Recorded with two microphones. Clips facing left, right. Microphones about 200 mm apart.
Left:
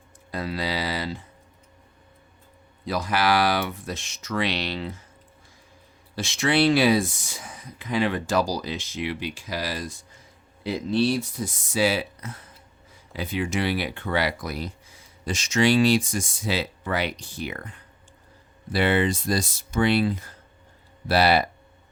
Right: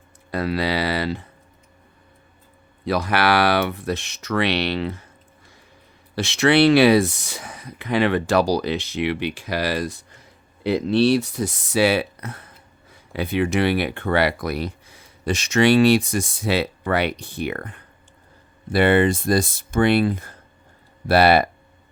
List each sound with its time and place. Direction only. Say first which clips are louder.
0.3 s speech: right 6 dB; 65° right (ahead or behind)
2.8 s speech: right 4 dB; 65° right (ahead or behind)
6.1 s speech: right 6 dB; 70° right (ahead or behind)